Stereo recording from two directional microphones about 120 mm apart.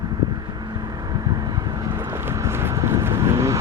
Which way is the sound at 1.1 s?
35° right (ahead or behind).